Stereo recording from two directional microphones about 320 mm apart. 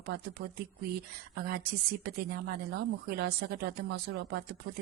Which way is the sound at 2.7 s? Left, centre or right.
Right.